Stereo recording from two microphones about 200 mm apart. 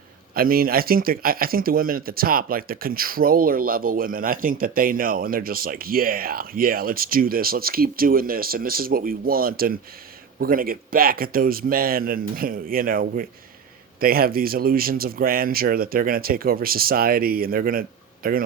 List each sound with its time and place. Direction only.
0.3 s speech: 45° right (ahead or behind)